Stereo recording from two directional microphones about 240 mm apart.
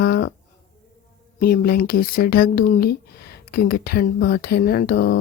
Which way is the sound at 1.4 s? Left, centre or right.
Left.